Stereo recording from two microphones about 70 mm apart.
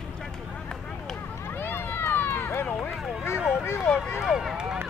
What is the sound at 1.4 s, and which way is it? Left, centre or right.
Run, left.